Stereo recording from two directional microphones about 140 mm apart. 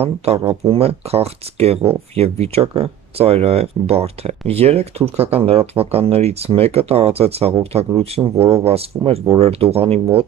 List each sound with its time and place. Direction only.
0.0 s speech: 45° right (ahead or behind)